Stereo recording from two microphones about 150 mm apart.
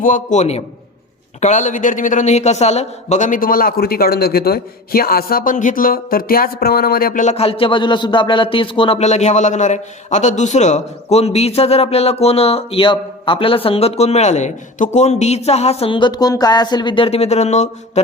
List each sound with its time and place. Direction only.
0.0 s a man's voice: 60° left (ahead or behind)
7.3 s speech: 40° left (ahead or behind)